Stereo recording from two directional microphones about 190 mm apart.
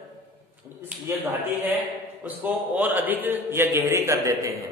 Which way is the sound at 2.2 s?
10° right (ahead or behind).